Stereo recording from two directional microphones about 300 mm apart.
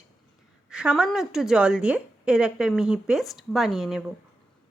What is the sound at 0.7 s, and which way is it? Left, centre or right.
A woman's voice, centre.